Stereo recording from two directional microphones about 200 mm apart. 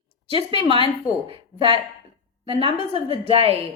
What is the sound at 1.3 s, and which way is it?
A woman's voice, 25° right (ahead or behind).